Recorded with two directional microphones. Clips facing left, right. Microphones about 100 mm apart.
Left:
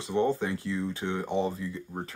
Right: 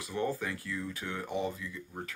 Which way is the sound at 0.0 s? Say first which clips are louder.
Left 7 dB; 25° left (ahead or behind).